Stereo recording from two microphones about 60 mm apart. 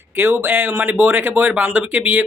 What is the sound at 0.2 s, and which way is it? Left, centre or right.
Speech, right.